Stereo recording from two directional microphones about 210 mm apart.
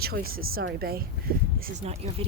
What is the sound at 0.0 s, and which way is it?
Speech, 45° right (ahead or behind).